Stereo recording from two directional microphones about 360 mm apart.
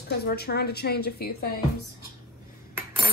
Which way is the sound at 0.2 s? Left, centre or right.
Left.